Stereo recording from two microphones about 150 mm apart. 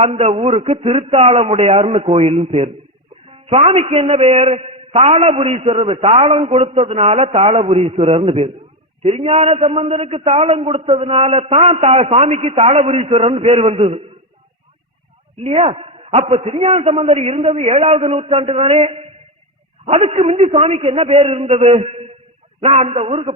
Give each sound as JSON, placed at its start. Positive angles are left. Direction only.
{"t": 0.0, "sound": "a man's voice", "side_deg": -45}
{"t": 15.4, "sound": "a man's voice", "side_deg": -40}